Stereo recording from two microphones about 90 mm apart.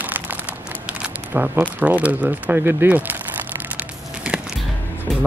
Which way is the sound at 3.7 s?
10° right (ahead or behind).